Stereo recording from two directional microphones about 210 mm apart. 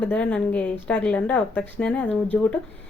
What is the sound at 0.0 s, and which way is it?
Speech, 5° left (ahead or behind).